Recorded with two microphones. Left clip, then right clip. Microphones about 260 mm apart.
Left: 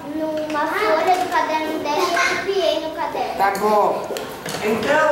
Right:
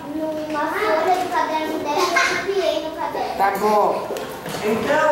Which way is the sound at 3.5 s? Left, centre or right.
Centre.